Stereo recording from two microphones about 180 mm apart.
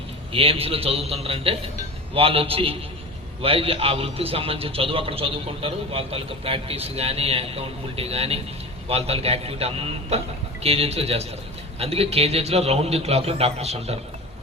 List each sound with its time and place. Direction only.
0.3 s a man's voice: 30° right (ahead or behind)